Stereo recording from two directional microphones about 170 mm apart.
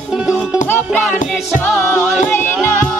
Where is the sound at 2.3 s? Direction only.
15° left (ahead or behind).